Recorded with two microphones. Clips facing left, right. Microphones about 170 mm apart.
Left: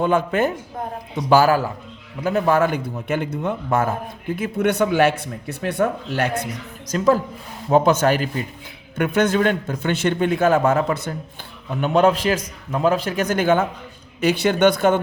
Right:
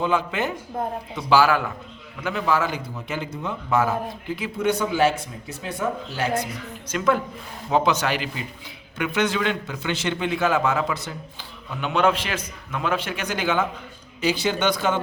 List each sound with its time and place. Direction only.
0.0 s a man's voice: 50° left (ahead or behind)
2.2 s speech: 50° left (ahead or behind)
6.9 s a man's voice: 35° left (ahead or behind)
7.7 s a man's voice: 45° left (ahead or behind)
11.8 s a man's voice: 40° left (ahead or behind)